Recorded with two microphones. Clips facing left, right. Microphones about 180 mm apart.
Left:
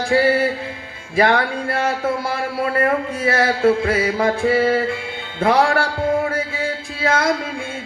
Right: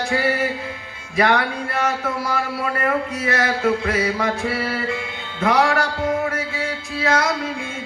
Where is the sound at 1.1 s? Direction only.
30° left (ahead or behind).